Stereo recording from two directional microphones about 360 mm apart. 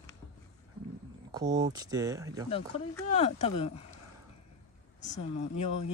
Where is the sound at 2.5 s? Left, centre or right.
Centre.